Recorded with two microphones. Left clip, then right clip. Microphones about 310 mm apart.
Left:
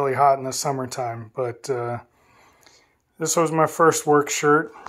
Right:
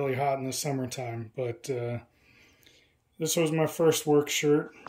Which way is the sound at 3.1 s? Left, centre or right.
Left.